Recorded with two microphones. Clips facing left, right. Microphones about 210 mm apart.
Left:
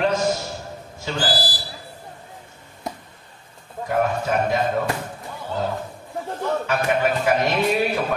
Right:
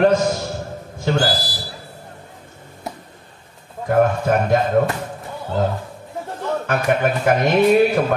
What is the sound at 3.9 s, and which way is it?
Speech, 50° right (ahead or behind).